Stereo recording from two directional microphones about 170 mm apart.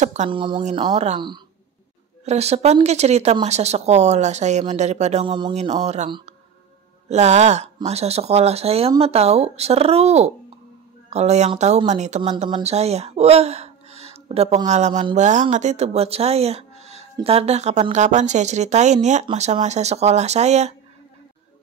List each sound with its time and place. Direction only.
0.0 s speech: 45° right (ahead or behind)
0.3 s speech: 30° right (ahead or behind)
0.9 s speech: 40° right (ahead or behind)
2.2 s speech: 40° right (ahead or behind)
5.2 s speech: 25° right (ahead or behind)
7.1 s speech: 40° right (ahead or behind)
12.2 s speech: 30° right (ahead or behind)